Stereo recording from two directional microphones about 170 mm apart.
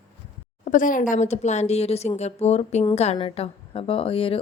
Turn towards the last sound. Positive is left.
turn(degrees=35)  # may be behind; listen again after turning